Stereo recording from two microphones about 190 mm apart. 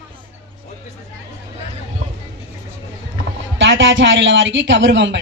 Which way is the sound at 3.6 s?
75° right (ahead or behind).